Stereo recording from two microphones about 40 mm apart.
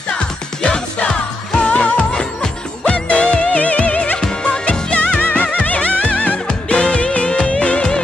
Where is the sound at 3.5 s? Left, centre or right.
Left.